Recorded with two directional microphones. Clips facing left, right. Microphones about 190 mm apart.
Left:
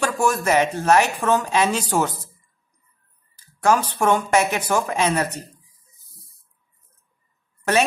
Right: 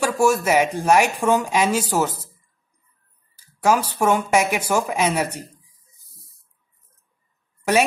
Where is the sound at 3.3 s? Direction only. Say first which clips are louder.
Even; 10° right (ahead or behind).